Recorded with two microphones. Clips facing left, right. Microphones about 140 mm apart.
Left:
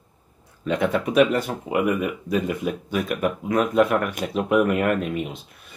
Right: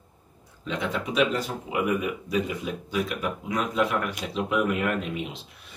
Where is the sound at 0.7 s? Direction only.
55° left (ahead or behind).